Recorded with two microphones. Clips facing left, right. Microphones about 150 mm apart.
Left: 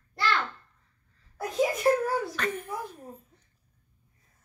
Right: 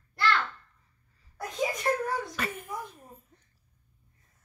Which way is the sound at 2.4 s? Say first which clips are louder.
Left 3 dB; 10° right (ahead or behind).